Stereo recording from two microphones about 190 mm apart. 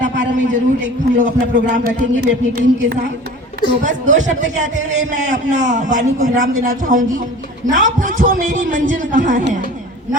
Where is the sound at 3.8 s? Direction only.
40° right (ahead or behind).